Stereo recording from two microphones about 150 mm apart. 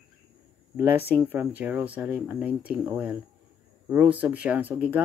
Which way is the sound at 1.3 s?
10° right (ahead or behind).